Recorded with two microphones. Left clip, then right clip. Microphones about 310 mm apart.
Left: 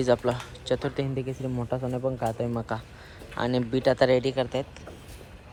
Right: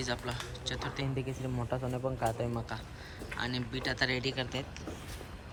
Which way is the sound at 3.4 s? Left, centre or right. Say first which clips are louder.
Left 10 dB; centre.